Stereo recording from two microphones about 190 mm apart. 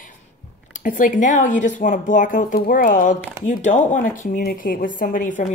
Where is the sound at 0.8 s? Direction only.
40° left (ahead or behind).